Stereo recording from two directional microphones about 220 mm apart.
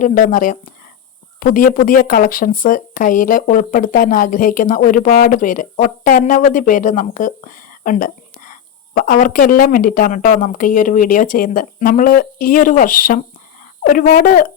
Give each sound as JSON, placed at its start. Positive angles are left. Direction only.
{"t": 0.0, "sound": "speech", "side_deg": 35}